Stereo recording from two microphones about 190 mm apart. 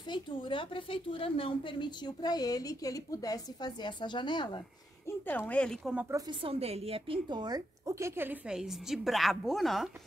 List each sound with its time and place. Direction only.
0.0 s a woman's voice: 25° left (ahead or behind)
5.0 s speech: 10° left (ahead or behind)
5.9 s a woman's voice: 15° right (ahead or behind)
6.4 s a woman's voice: 30° right (ahead or behind); by 9.8 s centre (ahead or behind)